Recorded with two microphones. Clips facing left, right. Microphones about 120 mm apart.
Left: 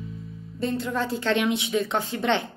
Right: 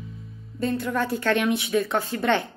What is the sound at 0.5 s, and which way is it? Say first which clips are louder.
A woman's voice: right 1 dB; 25° left (ahead or behind).